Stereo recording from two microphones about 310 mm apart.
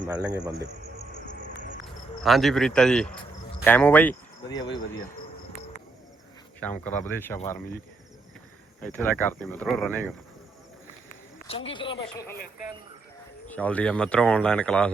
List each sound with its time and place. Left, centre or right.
0.0 s speech: centre
2.2 s speech: centre
7.0 s speech: centre
8.8 s speech: centre
11.1 s speech: left
13.5 s speech: centre